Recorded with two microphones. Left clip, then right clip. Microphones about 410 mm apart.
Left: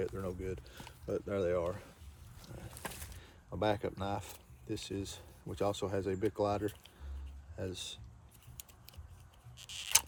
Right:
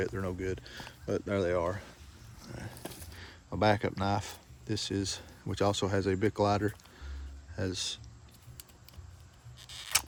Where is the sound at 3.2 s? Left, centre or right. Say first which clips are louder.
Right 6 dB; centre.